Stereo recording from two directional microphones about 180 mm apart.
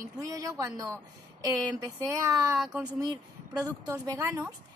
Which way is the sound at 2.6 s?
5° right (ahead or behind).